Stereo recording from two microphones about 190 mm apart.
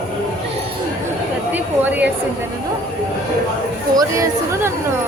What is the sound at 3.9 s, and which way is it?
Speech, 15° right (ahead or behind).